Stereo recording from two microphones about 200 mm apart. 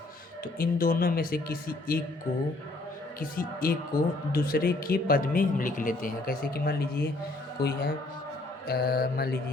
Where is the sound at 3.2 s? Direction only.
45° left (ahead or behind).